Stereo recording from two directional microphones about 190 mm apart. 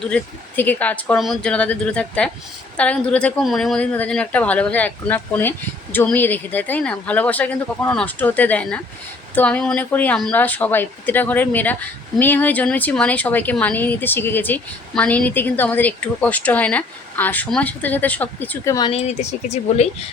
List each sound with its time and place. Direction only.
0.0 s speech: 10° left (ahead or behind)
18.9 s speech: 35° left (ahead or behind)